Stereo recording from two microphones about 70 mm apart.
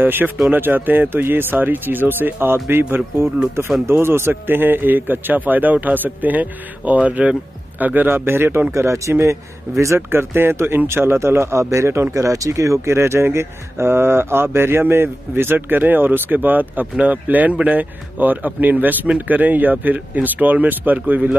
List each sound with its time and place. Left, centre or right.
0.0 s speech: right
8.7 s speech: right